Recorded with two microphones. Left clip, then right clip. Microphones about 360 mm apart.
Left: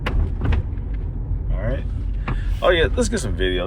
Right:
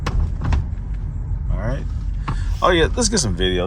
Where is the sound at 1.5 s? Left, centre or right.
Centre.